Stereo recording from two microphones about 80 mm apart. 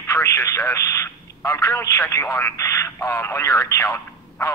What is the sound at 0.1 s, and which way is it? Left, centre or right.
Speech, left.